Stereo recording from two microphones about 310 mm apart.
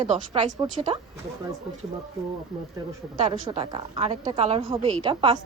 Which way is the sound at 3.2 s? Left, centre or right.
Centre.